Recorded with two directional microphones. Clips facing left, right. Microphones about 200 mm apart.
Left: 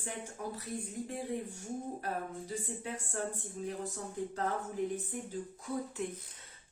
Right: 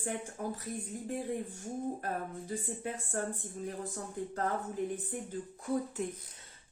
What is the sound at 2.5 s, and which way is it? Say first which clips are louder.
Speech: right 5 dB; 50° right (ahead or behind).